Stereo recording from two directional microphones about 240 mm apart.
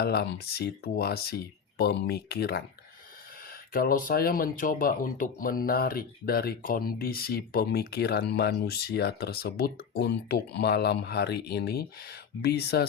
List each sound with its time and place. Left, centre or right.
0.0 s speech: left